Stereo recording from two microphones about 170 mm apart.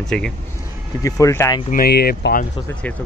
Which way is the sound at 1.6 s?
60° left (ahead or behind).